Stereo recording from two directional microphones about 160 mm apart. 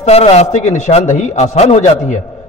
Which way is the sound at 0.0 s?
40° left (ahead or behind).